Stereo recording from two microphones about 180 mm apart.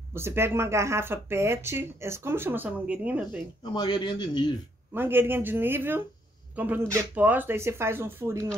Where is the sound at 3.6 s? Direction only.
25° left (ahead or behind).